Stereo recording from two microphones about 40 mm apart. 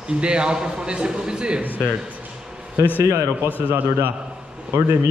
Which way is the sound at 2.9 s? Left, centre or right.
Left.